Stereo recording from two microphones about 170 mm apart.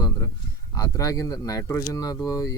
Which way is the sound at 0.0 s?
20° left (ahead or behind).